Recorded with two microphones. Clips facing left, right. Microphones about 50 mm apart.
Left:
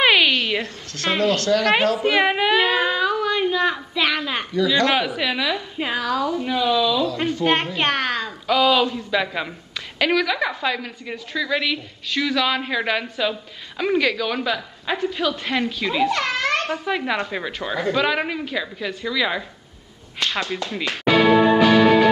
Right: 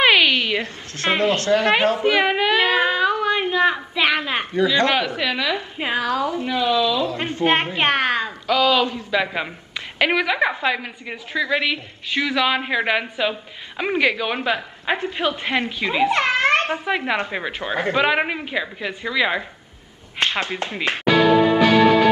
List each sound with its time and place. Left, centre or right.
0.0 s a sound: centre
0.9 s a woman's voice: right
2.1 s speech: centre
4.9 s a woman's voice: centre
5.8 s a woman's voice: centre
6.4 s a woman's voice: centre
7.1 s speech: right
7.4 s a child's voice: right
8.5 s a woman's voice: centre
8.9 s a woman's voice: centre
17.7 s a woman's voice: right